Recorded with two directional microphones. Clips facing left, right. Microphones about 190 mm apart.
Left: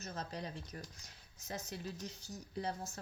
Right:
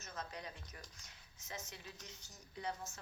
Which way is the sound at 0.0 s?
35° left (ahead or behind).